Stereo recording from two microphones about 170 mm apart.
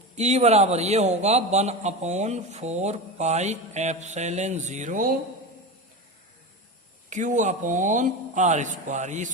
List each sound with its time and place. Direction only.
0.2 s a man's voice: 40° right (ahead or behind)
7.1 s speech: 45° right (ahead or behind)